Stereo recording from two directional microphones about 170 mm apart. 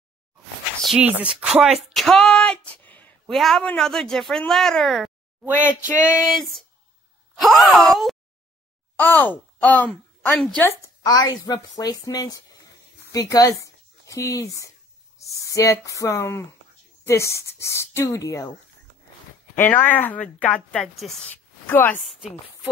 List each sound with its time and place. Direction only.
0.8 s a woman's voice: 5° right (ahead or behind)
5.9 s speech: 10° right (ahead or behind); by 10.7 s 10° left (ahead or behind)
11.1 s speech: 20° left (ahead or behind)
19.5 s speech: 10° left (ahead or behind)
21.6 s a woman's voice: 10° left (ahead or behind)
22.0 s speech: 5° right (ahead or behind)